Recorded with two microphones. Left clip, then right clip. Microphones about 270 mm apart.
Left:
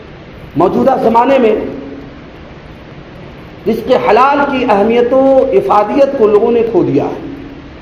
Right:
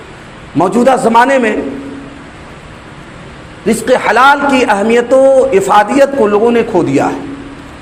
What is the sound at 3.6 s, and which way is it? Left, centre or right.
A man's voice, right.